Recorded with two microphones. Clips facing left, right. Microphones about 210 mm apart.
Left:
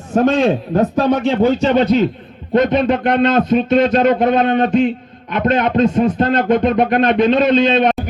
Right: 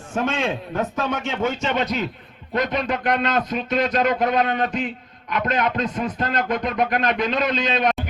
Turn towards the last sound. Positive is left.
turn(degrees=25)  # may be behind; listen again after turning